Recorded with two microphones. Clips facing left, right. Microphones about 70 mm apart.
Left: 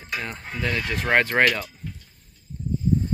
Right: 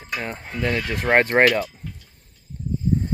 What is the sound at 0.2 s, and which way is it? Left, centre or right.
Speech, right.